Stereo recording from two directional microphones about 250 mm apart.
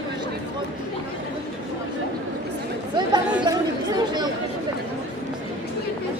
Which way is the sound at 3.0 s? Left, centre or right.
Centre.